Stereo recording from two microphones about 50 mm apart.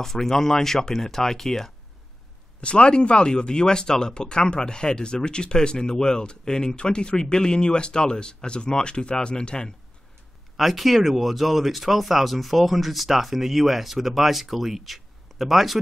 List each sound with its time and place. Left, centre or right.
0.0 s speech: centre
2.6 s speech: left
10.6 s speech: centre